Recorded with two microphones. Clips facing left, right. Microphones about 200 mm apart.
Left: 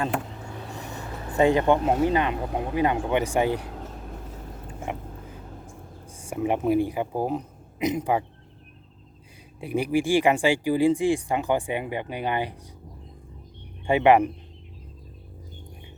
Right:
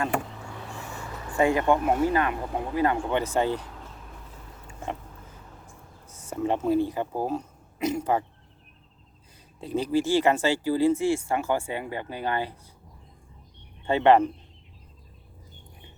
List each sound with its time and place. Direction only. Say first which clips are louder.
0.3 s vehicle: left 2 dB; 20° left (ahead or behind)
1.0 s speech: left 3 dB; 30° left (ahead or behind)
3.8 s vehicle: left 7 dB; 45° left (ahead or behind)
6.1 s speech: left 1 dB; 10° left (ahead or behind)
9.6 s speech: left 1 dB; 10° left (ahead or behind)
13.8 s speech: left 1 dB; 10° left (ahead or behind)